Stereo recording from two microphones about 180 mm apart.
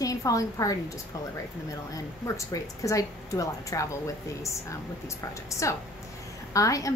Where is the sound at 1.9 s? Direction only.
20° left (ahead or behind).